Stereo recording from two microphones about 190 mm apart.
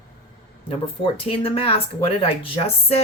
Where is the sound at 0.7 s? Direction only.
30° left (ahead or behind).